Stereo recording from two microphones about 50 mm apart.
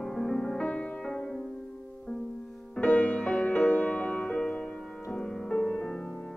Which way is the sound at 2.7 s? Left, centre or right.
Left.